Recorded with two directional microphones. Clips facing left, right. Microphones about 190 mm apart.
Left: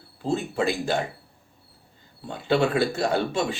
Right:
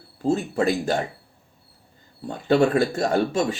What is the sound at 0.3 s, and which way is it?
Speech, 40° right (ahead or behind).